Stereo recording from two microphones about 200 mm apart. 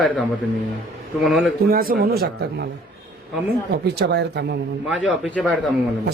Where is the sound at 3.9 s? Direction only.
55° right (ahead or behind).